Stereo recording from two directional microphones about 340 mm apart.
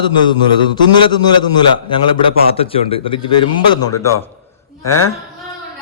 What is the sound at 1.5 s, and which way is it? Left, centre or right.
Speech, centre.